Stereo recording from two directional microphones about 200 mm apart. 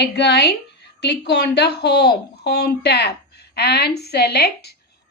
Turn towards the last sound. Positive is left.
turn(degrees=55)  # may be behind; listen again after turning